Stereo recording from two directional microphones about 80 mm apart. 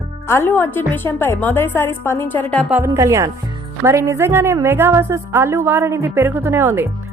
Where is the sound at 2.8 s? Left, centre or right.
Right.